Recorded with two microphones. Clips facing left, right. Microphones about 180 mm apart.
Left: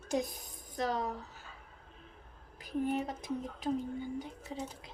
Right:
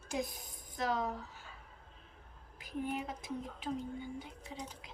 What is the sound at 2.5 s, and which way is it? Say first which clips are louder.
Speech: left 5 dB; 40° left (ahead or behind).